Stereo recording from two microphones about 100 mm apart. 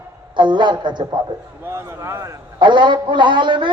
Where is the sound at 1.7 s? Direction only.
25° right (ahead or behind).